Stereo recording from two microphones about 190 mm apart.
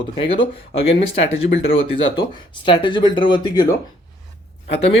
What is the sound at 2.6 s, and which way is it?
Speech, 25° left (ahead or behind).